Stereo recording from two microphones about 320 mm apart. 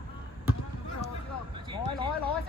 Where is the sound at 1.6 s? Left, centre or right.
Centre.